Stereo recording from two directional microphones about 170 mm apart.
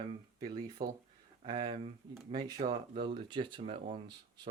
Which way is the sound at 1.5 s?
25° right (ahead or behind).